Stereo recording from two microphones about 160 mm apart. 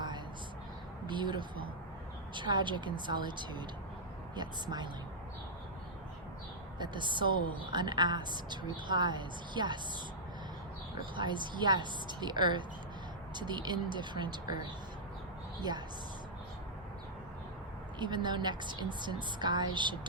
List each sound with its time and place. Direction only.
1.0 s a woman's voice: 30° right (ahead or behind)
6.7 s a woman's voice: 30° right (ahead or behind)
11.1 s a woman's voice: 30° right (ahead or behind)
18.0 s a woman's voice: 30° right (ahead or behind)